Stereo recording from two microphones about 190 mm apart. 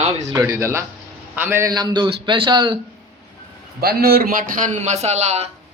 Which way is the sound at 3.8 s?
55° right (ahead or behind).